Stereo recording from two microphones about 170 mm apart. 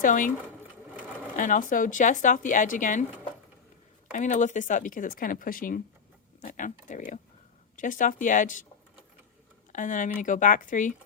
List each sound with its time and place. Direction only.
0.0 s speech: 50° left (ahead or behind)
1.4 s speech: 50° left (ahead or behind)
4.1 s speech: 45° left (ahead or behind)
9.7 s speech: 50° left (ahead or behind)